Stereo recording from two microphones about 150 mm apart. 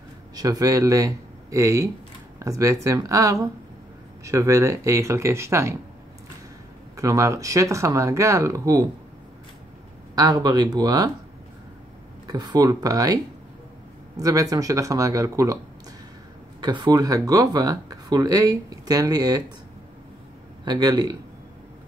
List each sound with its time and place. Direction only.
0.4 s speech: 25° right (ahead or behind)
7.0 s speech: 20° right (ahead or behind)
10.1 s speech: 25° right (ahead or behind)
12.3 s speech: 25° right (ahead or behind)
14.2 s speech: 25° right (ahead or behind)
16.6 s speech: 25° right (ahead or behind)
20.6 s speech: 30° right (ahead or behind)